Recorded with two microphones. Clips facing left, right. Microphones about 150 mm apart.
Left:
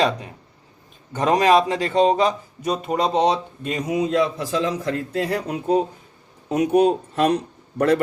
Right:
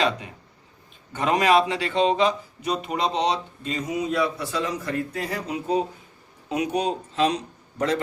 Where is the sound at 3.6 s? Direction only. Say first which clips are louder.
Left 4 dB; 65° left (ahead or behind).